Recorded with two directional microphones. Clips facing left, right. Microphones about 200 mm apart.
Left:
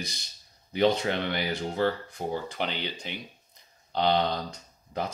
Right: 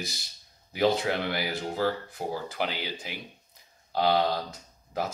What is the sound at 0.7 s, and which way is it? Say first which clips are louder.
Speech: left 1 dB; 5° right (ahead or behind).